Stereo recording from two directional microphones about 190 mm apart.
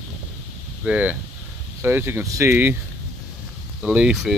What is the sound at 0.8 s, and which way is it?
Speech, 5° right (ahead or behind).